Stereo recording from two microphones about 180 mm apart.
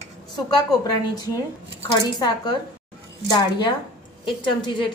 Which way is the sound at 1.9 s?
25° left (ahead or behind).